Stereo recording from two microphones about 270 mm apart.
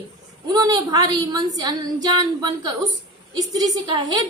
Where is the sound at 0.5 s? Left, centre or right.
Centre.